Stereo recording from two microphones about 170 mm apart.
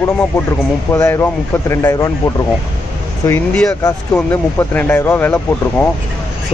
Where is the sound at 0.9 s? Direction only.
15° left (ahead or behind).